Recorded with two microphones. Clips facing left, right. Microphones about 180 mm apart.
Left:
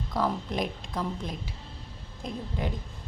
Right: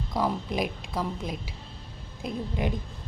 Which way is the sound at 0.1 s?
10° right (ahead or behind).